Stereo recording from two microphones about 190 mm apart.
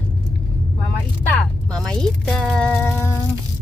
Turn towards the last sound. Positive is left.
turn(degrees=10)  # may be behind; listen again after turning